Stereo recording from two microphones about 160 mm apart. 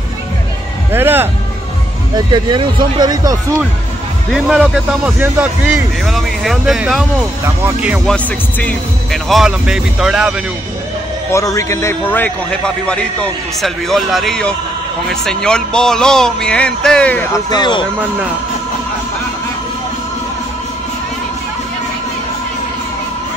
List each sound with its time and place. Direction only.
0.9 s a sound: 15° right (ahead or behind)
2.1 s speech: 30° right (ahead or behind)
4.3 s a man's voice: 5° right (ahead or behind)
8.1 s a man's voice: 5° left (ahead or behind)
11.3 s a man's voice: 20° left (ahead or behind)
17.5 s speech: 30° left (ahead or behind)
17.9 s speech: 10° right (ahead or behind)